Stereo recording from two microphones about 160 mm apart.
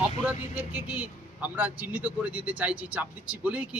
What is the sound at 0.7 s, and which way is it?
A man's voice, 10° right (ahead or behind).